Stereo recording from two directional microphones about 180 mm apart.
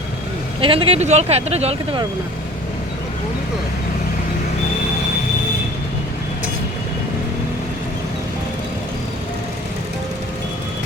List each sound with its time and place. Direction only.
0.6 s speech: 30° right (ahead or behind)